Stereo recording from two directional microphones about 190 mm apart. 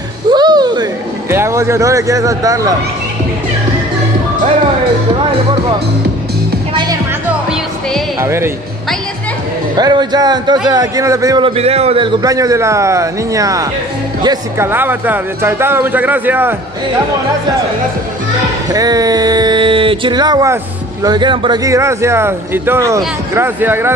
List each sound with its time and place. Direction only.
0.3 s music: 20° right (ahead or behind)
1.3 s a man's voice: 15° right (ahead or behind)
8.2 s speech: 15° right (ahead or behind)
9.8 s a man's voice: 20° right (ahead or behind)
18.7 s a man's voice: 20° right (ahead or behind)